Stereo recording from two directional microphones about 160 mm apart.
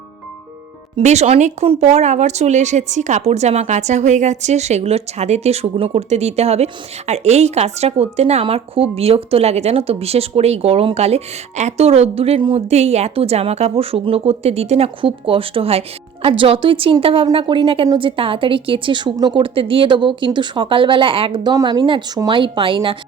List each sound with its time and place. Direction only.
0.9 s a woman's voice: 45° right (ahead or behind)